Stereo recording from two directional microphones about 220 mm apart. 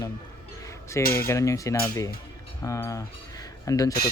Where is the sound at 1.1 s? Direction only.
15° left (ahead or behind).